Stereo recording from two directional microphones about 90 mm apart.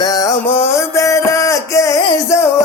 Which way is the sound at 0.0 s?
40° left (ahead or behind).